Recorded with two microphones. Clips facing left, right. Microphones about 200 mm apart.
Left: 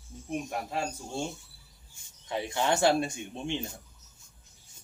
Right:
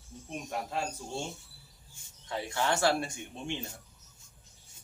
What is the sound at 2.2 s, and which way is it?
Speech, 20° left (ahead or behind).